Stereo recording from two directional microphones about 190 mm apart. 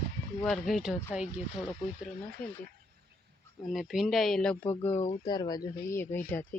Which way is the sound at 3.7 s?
Centre (ahead or behind).